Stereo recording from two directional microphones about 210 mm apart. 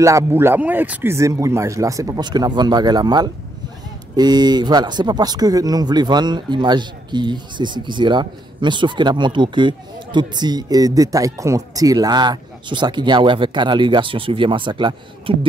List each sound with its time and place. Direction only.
0.0 s speech: 15° right (ahead or behind)